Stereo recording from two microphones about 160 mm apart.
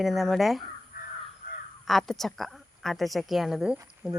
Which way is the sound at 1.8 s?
Centre (ahead or behind).